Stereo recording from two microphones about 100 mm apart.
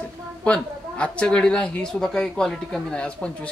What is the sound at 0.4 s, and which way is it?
Speech, 10° left (ahead or behind).